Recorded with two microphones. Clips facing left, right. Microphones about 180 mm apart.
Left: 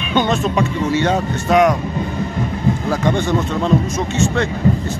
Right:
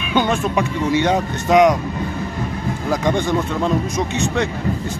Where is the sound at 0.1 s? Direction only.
10° right (ahead or behind).